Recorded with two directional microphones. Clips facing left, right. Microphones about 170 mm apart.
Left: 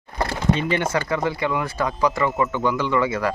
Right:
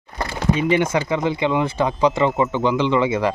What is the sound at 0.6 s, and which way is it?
Speech, 15° right (ahead or behind).